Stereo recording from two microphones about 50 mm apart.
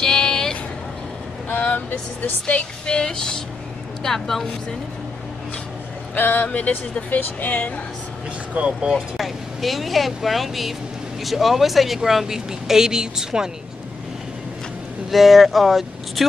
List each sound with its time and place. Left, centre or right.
0.0 s vehicle: centre
1.5 s speech: left
2.4 s vehicle: left; by 4.5 s centre
6.1 s speech: left
8.5 s speech: centre
9.1 s speech: centre
15.0 s speech: centre